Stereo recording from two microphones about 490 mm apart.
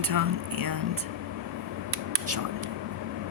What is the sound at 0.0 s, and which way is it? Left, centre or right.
Speech, right.